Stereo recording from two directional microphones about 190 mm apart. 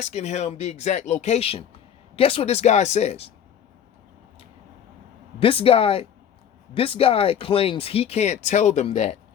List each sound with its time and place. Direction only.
0.0 s speech: 35° left (ahead or behind)
5.4 s speech: 30° left (ahead or behind)